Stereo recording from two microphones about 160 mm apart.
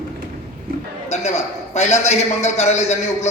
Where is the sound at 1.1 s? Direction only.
45° left (ahead or behind).